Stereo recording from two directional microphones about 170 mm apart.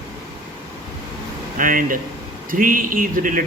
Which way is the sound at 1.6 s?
55° right (ahead or behind).